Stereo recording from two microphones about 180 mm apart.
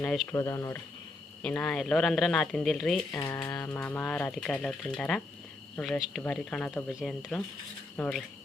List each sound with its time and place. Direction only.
0.0 s speech: 5° left (ahead or behind)
0.3 s speech: 15° left (ahead or behind)
1.4 s speech: 5° left (ahead or behind)
3.1 s speech: 15° left (ahead or behind)